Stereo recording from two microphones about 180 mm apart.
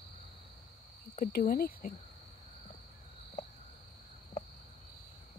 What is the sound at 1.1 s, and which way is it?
Cricket, 50° left (ahead or behind).